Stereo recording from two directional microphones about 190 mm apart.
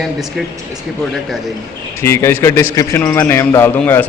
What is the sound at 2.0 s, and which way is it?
A man's voice, 15° left (ahead or behind).